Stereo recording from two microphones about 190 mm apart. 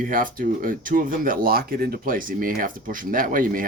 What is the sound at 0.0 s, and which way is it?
Speech, 45° right (ahead or behind).